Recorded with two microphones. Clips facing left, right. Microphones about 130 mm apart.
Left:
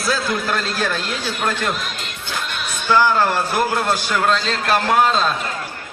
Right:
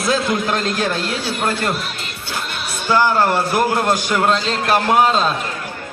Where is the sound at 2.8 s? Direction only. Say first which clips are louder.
Right 1 dB; 10° right (ahead or behind).